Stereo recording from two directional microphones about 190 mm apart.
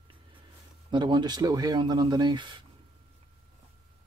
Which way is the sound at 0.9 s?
25° right (ahead or behind).